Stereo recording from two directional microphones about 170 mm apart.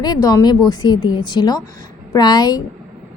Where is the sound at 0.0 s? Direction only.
20° left (ahead or behind).